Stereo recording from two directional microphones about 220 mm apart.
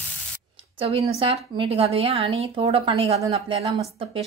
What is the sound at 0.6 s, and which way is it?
A woman's voice, 25° right (ahead or behind).